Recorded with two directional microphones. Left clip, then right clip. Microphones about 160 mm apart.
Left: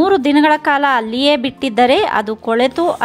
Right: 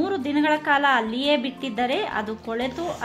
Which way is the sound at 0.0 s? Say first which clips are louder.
Left 11 dB; 50° left (ahead or behind).